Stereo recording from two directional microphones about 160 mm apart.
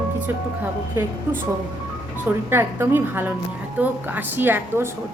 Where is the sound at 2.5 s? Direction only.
15° right (ahead or behind).